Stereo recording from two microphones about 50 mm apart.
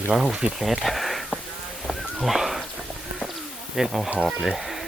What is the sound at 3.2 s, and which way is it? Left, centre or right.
Bird, centre.